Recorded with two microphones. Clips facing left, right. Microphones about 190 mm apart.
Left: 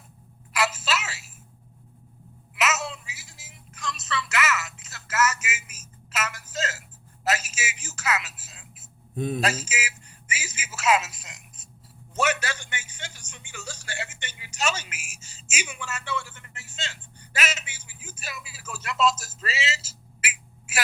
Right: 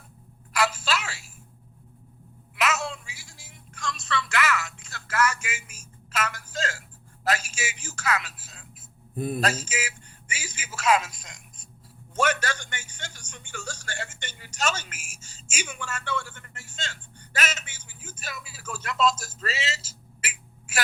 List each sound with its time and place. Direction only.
0.5 s telephone: 5° left (ahead or behind)
2.6 s music: 5° left (ahead or behind)
7.3 s a sound: 5° left (ahead or behind)
9.1 s a man's voice: 10° right (ahead or behind)
9.4 s a sound: 5° left (ahead or behind)
12.1 s a man's voice: 5° left (ahead or behind)